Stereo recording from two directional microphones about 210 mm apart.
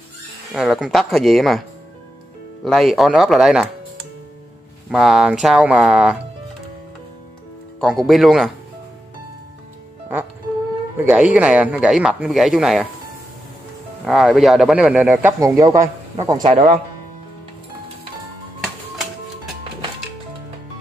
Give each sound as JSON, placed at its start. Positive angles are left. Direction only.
{"t": 0.6, "sound": "speech", "side_deg": 0}
{"t": 2.6, "sound": "speech", "side_deg": 0}
{"t": 4.9, "sound": "speech", "side_deg": 0}
{"t": 7.8, "sound": "speech", "side_deg": 0}
{"t": 11.1, "sound": "speech", "side_deg": -5}
{"t": 14.0, "sound": "a man's voice", "side_deg": 0}
{"t": 16.4, "sound": "speech", "side_deg": -35}